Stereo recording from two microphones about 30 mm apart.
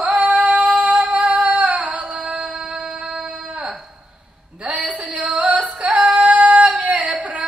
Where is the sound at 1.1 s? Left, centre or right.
Right.